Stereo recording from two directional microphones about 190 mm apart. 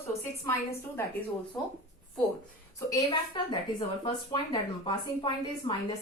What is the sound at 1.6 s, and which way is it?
Speech, 10° left (ahead or behind).